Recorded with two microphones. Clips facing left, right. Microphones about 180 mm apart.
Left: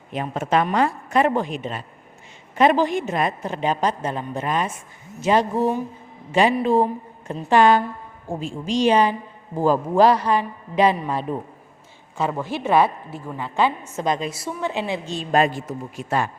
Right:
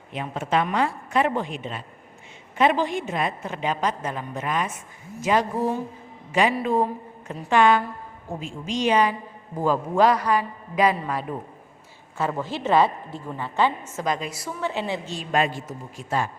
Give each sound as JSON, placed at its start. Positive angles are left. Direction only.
{"t": 0.1, "sound": "a man's voice", "side_deg": 45}
{"t": 3.5, "sound": "a woman's voice", "side_deg": 35}
{"t": 12.3, "sound": "a woman's voice", "side_deg": 10}
{"t": 15.3, "sound": "a man's voice", "side_deg": 45}